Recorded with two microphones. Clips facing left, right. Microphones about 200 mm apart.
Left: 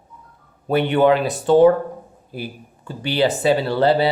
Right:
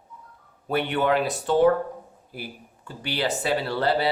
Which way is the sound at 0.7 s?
25° left (ahead or behind).